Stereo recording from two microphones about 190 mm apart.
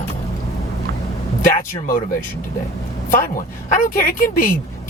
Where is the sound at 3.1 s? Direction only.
45° left (ahead or behind).